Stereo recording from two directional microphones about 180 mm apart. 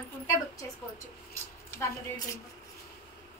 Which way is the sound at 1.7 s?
15° left (ahead or behind).